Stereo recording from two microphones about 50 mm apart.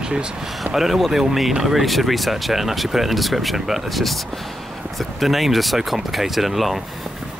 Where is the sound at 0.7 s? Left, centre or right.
Centre.